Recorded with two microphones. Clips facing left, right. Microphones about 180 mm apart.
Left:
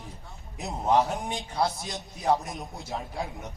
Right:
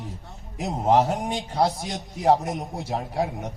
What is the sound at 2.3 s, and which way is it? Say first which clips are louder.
A man's voice: right 6 dB; 75° right (ahead or behind).